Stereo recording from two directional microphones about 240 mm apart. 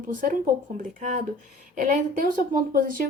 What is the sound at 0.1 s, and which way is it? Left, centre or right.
A woman's voice, right.